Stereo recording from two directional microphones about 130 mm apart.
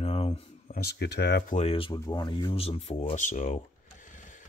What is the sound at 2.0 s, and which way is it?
Speech, 30° left (ahead or behind).